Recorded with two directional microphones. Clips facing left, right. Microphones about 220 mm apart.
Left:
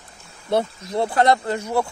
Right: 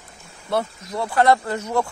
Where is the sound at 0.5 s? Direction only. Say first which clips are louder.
Left 3 dB; 25° left (ahead or behind); by 1.9 s 10° left (ahead or behind).